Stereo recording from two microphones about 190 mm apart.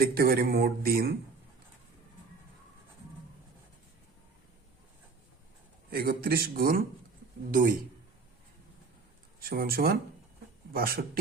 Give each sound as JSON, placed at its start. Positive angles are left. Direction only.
{"t": 0.0, "sound": "speech", "side_deg": -50}
{"t": 5.9, "sound": "speech", "side_deg": -50}
{"t": 9.4, "sound": "speech", "side_deg": -50}